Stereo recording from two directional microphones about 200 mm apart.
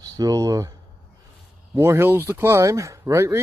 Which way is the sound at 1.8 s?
15° right (ahead or behind).